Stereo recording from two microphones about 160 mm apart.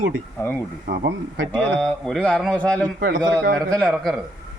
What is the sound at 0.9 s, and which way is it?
Speech, 90° right.